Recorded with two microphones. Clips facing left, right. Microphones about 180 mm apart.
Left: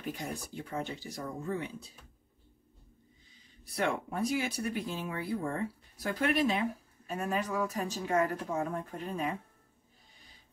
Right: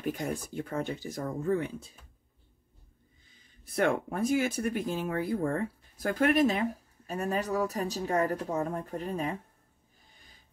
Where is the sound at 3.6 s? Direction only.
50° right (ahead or behind).